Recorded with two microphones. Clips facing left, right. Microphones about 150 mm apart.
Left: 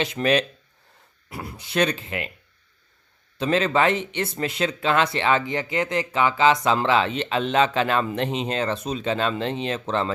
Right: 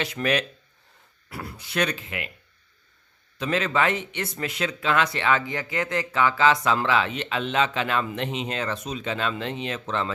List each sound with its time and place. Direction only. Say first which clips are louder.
0.0 s speech: left 4 dB; 25° left (ahead or behind)
3.3 s speech: left 4 dB; 30° left (ahead or behind)